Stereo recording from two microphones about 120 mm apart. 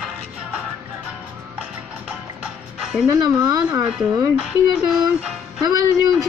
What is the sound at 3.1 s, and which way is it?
Speech, 35° right (ahead or behind).